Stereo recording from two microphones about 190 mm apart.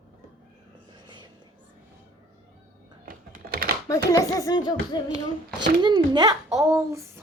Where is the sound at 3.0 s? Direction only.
50° right (ahead or behind).